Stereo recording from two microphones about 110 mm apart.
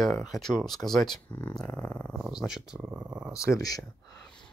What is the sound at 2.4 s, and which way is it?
Speech, 5° right (ahead or behind).